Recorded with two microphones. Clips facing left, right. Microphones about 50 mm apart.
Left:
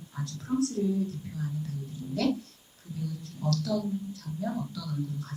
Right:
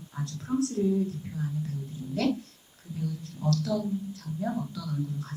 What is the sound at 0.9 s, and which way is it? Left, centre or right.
Speech, right.